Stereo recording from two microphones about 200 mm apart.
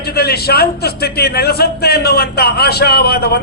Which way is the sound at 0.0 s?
50° left (ahead or behind).